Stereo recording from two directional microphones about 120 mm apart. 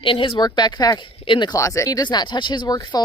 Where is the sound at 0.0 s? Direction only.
45° left (ahead or behind).